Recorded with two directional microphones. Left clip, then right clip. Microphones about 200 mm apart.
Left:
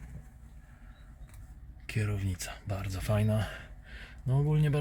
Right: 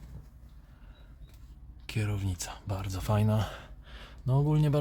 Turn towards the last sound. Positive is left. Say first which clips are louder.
# right 3 dB
turn(degrees=-25)  # may be behind; listen again after turning